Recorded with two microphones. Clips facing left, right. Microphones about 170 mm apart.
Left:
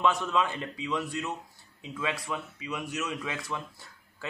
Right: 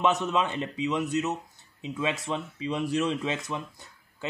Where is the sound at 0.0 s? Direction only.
20° right (ahead or behind).